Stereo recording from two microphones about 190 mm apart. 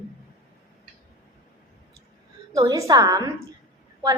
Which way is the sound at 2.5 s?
15° right (ahead or behind).